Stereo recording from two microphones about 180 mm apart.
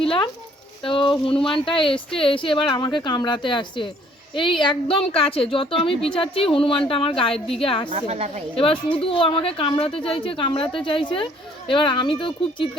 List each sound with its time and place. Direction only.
0.0 s a woman's voice: 30° left (ahead or behind)
7.9 s a woman's voice: 35° right (ahead or behind)
8.5 s a woman's voice: 30° left (ahead or behind)